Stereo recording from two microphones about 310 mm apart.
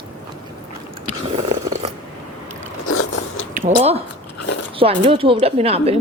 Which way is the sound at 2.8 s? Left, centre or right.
Left.